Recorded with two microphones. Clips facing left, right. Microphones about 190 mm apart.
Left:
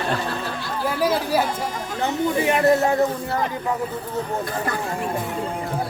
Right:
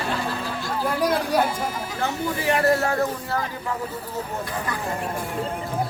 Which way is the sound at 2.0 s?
20° left (ahead or behind).